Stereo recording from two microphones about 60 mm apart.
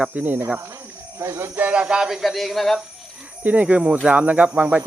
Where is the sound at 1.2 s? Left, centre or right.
Right.